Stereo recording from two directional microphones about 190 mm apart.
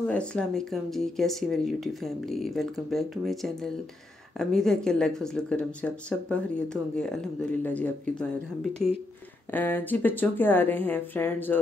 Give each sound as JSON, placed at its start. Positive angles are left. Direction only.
{"t": 0.0, "sound": "speech", "side_deg": 5}